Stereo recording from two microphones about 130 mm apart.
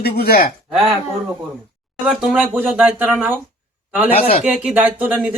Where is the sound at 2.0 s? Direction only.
10° right (ahead or behind).